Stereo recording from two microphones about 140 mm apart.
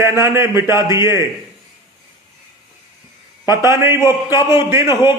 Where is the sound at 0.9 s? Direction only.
20° right (ahead or behind).